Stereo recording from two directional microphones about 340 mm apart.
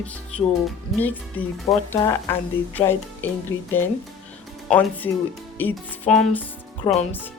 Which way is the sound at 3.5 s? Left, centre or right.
Left.